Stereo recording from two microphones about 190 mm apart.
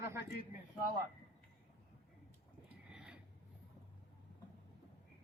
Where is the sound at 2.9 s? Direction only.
5° right (ahead or behind).